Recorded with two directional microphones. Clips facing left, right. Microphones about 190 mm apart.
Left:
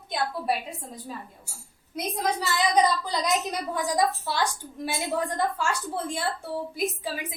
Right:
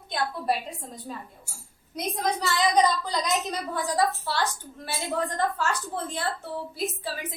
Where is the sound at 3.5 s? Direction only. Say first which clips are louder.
Left 1 dB; 15° left (ahead or behind).